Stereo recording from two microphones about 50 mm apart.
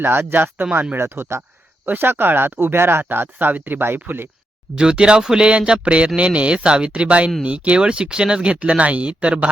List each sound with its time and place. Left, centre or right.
0.0 s speech: right
0.9 s speech: right
1.9 s speech: right
3.0 s speech: right
4.8 s speech: centre